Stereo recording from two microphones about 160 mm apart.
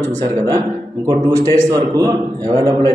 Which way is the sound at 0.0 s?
20° right (ahead or behind).